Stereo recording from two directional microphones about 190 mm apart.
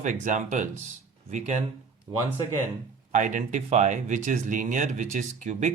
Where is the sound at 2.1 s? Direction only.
20° right (ahead or behind).